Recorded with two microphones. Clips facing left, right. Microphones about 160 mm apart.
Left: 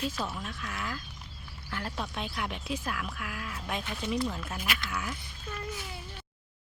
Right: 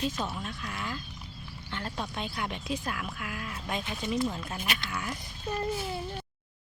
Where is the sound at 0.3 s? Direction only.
Centre (ahead or behind).